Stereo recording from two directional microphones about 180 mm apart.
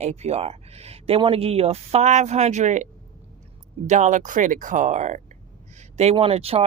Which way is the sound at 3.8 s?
40° right (ahead or behind).